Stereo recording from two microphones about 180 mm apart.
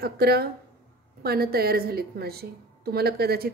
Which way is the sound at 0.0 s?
60° right (ahead or behind).